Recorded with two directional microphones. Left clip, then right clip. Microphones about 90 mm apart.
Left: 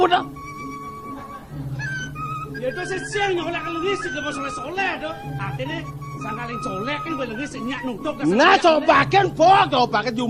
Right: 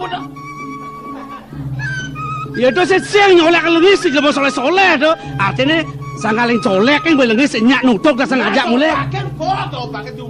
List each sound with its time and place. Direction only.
0.0 s speech: 20° right (ahead or behind)
2.3 s a man's voice: 25° right (ahead or behind)